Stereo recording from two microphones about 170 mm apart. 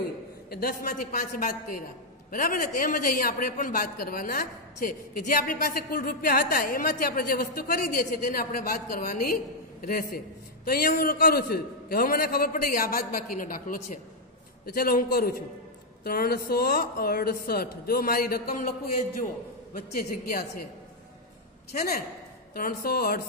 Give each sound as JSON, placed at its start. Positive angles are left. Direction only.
{"t": 0.5, "sound": "a woman's voice", "side_deg": 60}
{"t": 21.7, "sound": "a woman's voice", "side_deg": 60}